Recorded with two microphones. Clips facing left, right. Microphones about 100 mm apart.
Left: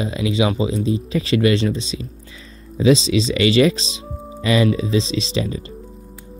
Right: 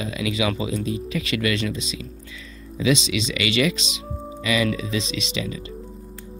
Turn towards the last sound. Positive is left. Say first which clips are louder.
# left 6 dB
turn(degrees=35)  # may be behind; listen again after turning